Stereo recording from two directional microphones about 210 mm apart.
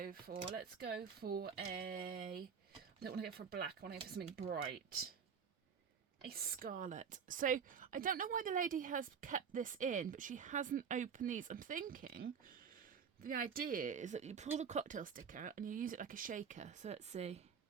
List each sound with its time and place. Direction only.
0.0 s speech: 45° right (ahead or behind)
6.2 s a woman's voice: 45° right (ahead or behind); by 17.4 s 30° right (ahead or behind)